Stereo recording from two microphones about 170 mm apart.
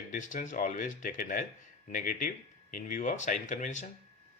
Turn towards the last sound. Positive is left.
turn(degrees=45)  # may be behind; listen again after turning